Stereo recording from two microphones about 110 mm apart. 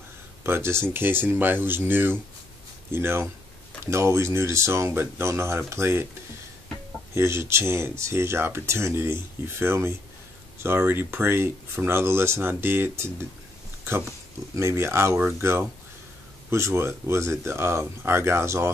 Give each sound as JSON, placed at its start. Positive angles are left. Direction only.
{"t": 0.4, "sound": "speech", "side_deg": -20}
{"t": 7.2, "sound": "speech", "side_deg": -25}
{"t": 14.5, "sound": "speech", "side_deg": -25}
{"t": 16.4, "sound": "speech", "side_deg": -25}